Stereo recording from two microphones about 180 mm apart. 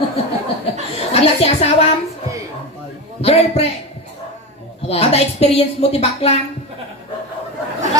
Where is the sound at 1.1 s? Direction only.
35° left (ahead or behind).